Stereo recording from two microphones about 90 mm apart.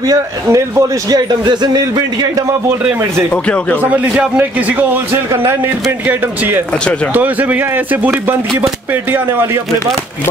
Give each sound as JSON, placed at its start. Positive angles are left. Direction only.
{"t": 0.0, "sound": "a man's voice", "side_deg": -40}
{"t": 1.4, "sound": "speech", "side_deg": -55}
{"t": 2.8, "sound": "a man's voice", "side_deg": -15}
{"t": 3.3, "sound": "speech", "side_deg": 15}
{"t": 3.8, "sound": "a man's voice", "side_deg": -15}
{"t": 9.1, "sound": "speech", "side_deg": -25}